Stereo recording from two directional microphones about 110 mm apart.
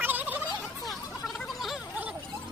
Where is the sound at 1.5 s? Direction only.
Centre (ahead or behind).